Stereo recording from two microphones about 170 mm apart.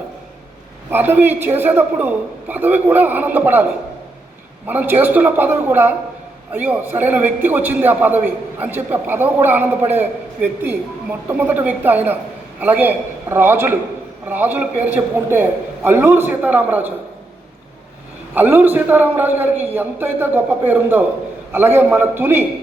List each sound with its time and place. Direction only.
0.9 s a man's voice: 10° right (ahead or behind)
18.3 s a man's voice: 10° right (ahead or behind)